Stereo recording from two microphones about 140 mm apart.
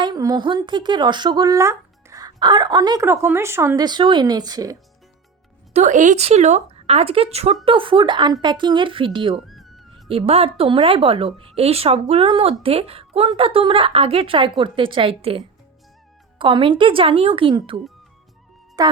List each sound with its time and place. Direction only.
0.0 s speech: 30° right (ahead or behind)
3.8 s speech: 35° right (ahead or behind)
5.7 s speech: 60° right (ahead or behind); by 9.4 s 35° right (ahead or behind)
9.5 s music: centre (ahead or behind)
10.1 s speech: 45° right (ahead or behind)
18.8 s speech: 30° right (ahead or behind)